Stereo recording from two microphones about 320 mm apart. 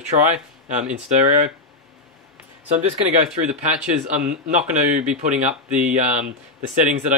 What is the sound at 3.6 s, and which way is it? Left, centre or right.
Speech, right.